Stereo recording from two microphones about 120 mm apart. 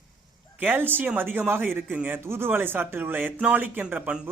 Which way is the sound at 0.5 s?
15° right (ahead or behind).